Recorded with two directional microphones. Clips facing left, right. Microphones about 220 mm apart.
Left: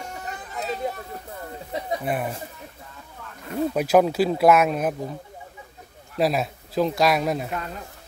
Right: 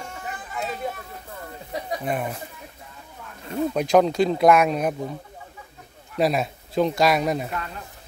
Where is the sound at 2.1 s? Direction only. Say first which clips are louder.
Right 1 dB; 5° left (ahead or behind).